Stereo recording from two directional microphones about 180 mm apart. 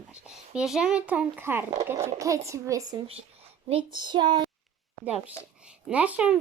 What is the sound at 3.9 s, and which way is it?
Speech, 25° right (ahead or behind).